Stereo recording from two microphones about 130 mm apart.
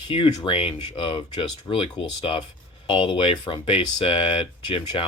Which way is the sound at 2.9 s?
40° left (ahead or behind).